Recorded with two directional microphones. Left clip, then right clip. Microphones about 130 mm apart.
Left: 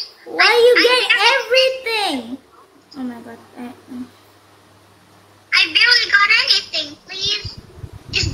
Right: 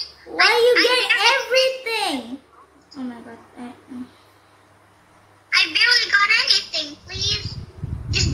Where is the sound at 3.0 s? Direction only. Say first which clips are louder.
Left 3 dB; 20° left (ahead or behind).